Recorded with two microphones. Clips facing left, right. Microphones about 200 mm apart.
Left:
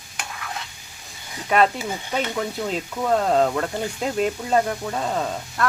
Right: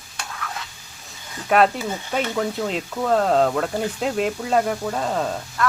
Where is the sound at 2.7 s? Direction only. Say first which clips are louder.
Left 1 dB; centre (ahead or behind).